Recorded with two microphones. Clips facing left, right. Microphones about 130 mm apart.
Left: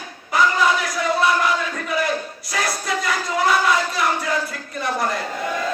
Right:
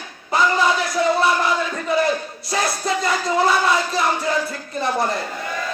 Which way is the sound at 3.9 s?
25° right (ahead or behind).